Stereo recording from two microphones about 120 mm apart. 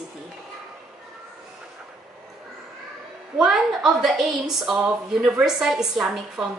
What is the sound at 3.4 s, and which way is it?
A woman's voice, 5° right (ahead or behind).